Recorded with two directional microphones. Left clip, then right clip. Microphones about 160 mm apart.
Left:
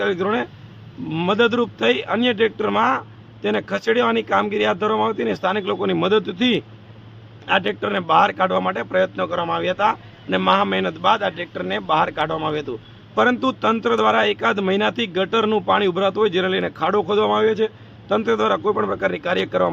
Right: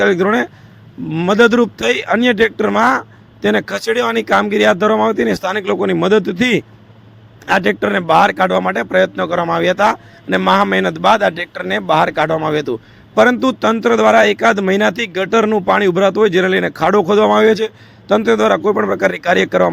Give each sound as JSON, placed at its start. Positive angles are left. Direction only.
{"t": 0.0, "sound": "a man's voice", "side_deg": -35}